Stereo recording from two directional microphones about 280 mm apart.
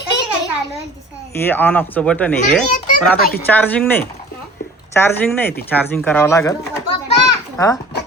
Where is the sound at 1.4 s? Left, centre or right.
Centre.